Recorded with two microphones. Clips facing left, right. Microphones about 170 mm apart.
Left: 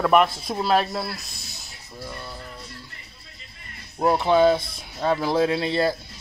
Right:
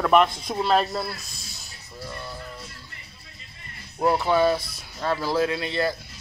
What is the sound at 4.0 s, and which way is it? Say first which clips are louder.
Speech: left 2 dB; 20° left (ahead or behind).